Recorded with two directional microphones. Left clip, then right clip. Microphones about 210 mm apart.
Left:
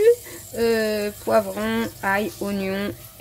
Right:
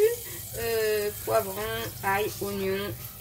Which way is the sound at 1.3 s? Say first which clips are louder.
Left 8 dB; 65° left (ahead or behind).